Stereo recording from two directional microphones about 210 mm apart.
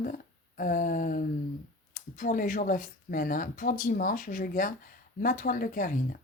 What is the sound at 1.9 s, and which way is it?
Speech, 40° left (ahead or behind).